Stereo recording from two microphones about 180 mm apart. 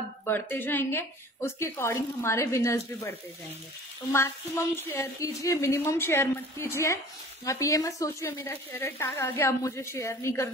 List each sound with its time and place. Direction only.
0.2 s a woman's voice: 10° left (ahead or behind)